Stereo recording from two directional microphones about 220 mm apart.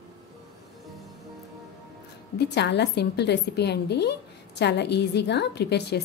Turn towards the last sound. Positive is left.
turn(degrees=50)  # may be behind; listen again after turning